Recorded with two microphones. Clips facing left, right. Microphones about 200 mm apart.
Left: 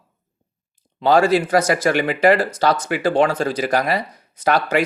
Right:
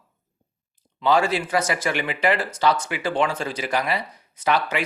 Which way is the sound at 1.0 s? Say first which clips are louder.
Left 5 dB; 40° left (ahead or behind).